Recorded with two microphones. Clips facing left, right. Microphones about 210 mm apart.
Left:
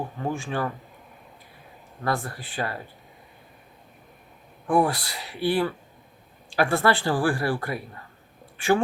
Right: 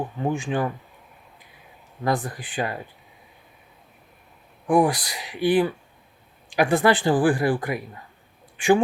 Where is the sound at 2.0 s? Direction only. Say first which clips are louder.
Right 3 dB; 15° right (ahead or behind).